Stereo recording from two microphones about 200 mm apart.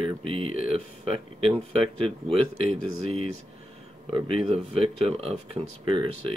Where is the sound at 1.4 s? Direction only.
30° right (ahead or behind).